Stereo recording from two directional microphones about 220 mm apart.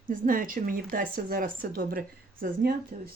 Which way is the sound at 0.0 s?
40° right (ahead or behind).